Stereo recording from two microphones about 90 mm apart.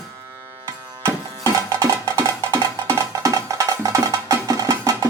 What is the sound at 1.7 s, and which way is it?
Music, 40° right (ahead or behind).